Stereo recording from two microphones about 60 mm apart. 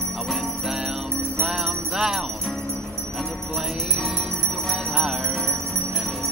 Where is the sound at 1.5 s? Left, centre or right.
Centre.